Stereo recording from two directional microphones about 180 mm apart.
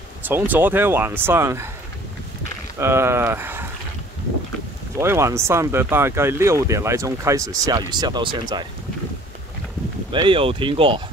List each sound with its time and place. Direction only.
0.2 s speech: 10° right (ahead or behind)
2.8 s speech: 15° right (ahead or behind)
4.9 s speech: 15° right (ahead or behind)
10.1 s speech: 30° right (ahead or behind)